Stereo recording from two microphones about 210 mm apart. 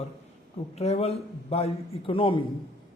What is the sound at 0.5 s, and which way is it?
A man's voice, 30° left (ahead or behind).